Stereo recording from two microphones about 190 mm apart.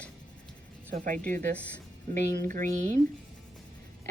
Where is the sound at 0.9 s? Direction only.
45° right (ahead or behind).